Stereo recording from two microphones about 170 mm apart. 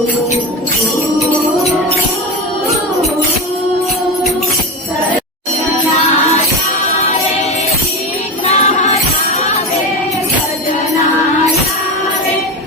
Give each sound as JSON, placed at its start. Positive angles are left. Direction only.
{"t": 8.4, "sound": "music", "side_deg": 40}